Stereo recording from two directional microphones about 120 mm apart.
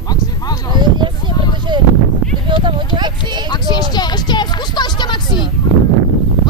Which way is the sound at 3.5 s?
35° left (ahead or behind).